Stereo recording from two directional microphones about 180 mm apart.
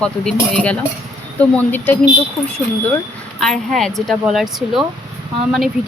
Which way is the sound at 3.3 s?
Centre (ahead or behind).